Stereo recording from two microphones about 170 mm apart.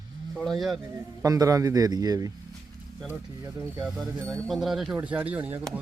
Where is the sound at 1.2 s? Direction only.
20° right (ahead or behind).